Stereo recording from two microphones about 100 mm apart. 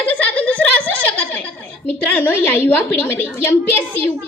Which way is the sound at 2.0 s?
15° left (ahead or behind).